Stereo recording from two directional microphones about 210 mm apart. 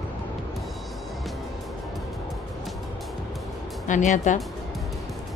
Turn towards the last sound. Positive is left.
turn(degrees=35)  # may be behind; listen again after turning